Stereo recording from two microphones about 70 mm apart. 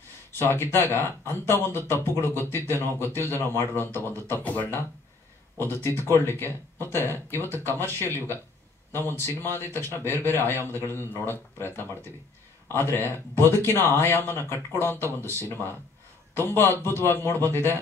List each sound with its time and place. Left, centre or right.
0.5 s a man's voice: left
4.4 s speech: left
5.6 s a man's voice: left
12.7 s a man's voice: left